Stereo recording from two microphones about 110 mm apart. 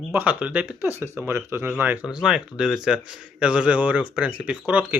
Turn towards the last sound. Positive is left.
turn(degrees=-15)  # may be behind; listen again after turning